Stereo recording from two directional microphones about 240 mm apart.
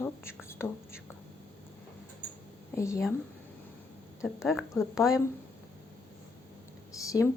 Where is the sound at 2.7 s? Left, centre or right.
Centre.